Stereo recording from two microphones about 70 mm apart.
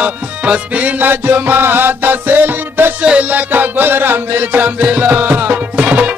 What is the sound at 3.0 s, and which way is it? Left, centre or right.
Music, centre.